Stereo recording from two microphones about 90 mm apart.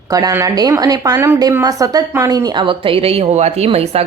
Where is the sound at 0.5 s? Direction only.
45° right (ahead or behind).